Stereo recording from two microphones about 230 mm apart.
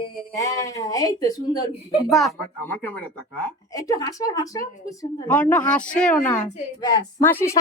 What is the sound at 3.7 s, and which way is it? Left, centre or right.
A woman's voice, centre.